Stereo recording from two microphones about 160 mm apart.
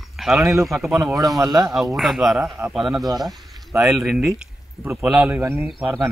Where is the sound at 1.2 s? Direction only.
20° right (ahead or behind).